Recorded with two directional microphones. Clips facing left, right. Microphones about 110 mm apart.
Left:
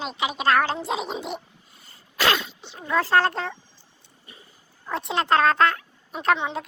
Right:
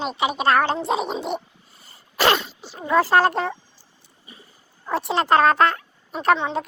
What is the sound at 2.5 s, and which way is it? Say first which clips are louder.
Speech: right 5 dB; 5° right (ahead or behind).